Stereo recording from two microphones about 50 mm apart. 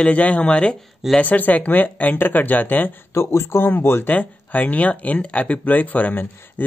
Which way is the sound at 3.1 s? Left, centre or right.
Left.